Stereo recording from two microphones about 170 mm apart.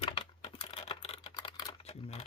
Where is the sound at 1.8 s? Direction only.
40° left (ahead or behind).